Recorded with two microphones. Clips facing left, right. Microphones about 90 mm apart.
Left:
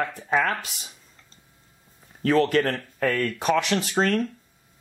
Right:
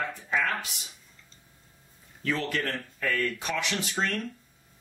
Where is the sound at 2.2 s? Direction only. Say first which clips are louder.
Left 10 dB; 50° left (ahead or behind).